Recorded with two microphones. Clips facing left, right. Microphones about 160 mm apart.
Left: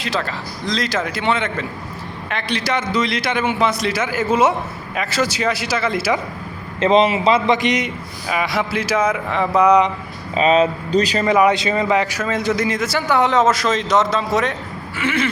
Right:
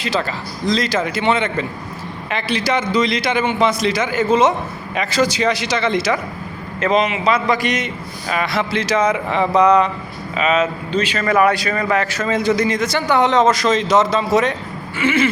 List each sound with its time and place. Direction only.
0.0 s a man's voice: centre (ahead or behind)
6.7 s a man's voice: 30° left (ahead or behind); by 9.9 s 15° left (ahead or behind)
10.3 s speech: 35° left (ahead or behind)
11.3 s a man's voice: 20° left (ahead or behind)
12.3 s a man's voice: centre (ahead or behind)